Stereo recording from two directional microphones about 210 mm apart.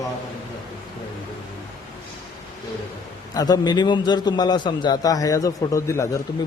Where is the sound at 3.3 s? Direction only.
20° left (ahead or behind).